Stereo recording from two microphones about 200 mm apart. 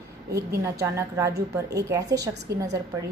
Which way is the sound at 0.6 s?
15° right (ahead or behind).